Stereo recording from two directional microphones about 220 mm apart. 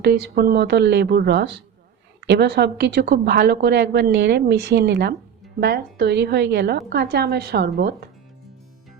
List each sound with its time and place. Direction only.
0.0 s a woman's voice: 50° right (ahead or behind)